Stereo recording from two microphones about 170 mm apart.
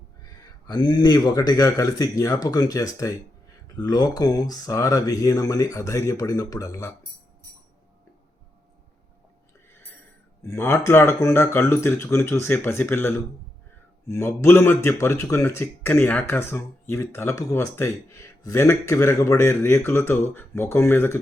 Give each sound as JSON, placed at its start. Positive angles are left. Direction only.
{"t": 0.7, "sound": "speech", "side_deg": 30}
{"t": 10.4, "sound": "speech", "side_deg": 15}